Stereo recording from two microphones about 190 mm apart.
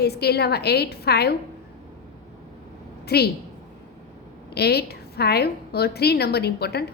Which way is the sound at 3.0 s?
55° left (ahead or behind).